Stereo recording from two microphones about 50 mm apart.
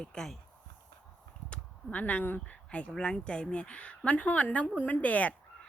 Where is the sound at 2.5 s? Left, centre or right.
Left.